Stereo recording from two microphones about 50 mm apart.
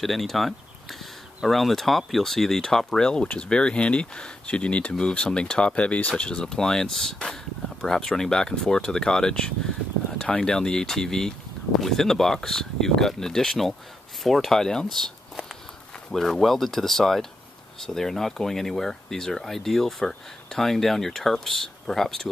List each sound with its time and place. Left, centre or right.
0.0 s speech: centre